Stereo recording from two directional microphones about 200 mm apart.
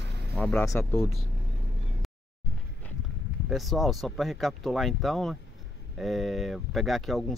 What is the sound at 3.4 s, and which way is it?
Speech, centre (ahead or behind).